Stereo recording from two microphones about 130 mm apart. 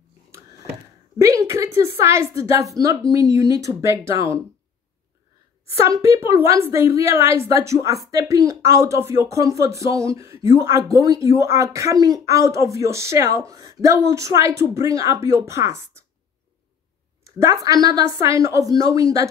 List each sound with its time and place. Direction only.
0.3 s a sound: 25° right (ahead or behind)
3.1 s speech: 25° right (ahead or behind)
5.8 s speech: 25° right (ahead or behind)
17.2 s speech: 25° right (ahead or behind)